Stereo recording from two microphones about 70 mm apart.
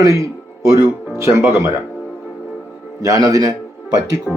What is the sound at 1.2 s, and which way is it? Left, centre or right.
Speech, right.